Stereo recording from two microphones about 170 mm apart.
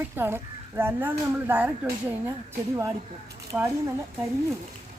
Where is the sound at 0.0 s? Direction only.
15° right (ahead or behind).